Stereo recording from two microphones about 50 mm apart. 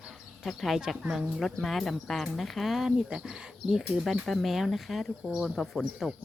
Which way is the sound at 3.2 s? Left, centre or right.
Centre.